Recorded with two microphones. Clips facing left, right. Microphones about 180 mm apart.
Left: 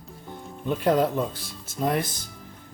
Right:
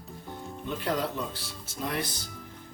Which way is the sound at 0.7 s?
50° left (ahead or behind).